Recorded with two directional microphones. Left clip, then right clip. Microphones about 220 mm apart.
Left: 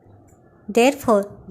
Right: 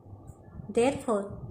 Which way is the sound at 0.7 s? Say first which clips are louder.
Left 10 dB; 40° left (ahead or behind).